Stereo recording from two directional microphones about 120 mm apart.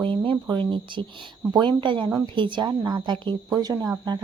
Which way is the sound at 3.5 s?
30° right (ahead or behind).